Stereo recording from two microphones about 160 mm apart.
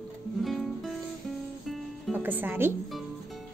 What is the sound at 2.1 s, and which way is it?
Speech, 10° right (ahead or behind).